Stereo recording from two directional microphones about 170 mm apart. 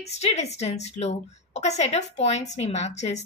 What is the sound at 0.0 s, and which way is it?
A woman's voice, 40° left (ahead or behind).